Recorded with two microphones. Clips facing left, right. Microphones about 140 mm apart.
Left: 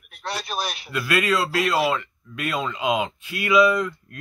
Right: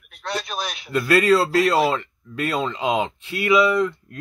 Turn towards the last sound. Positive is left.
turn(degrees=-25)  # may be behind; listen again after turning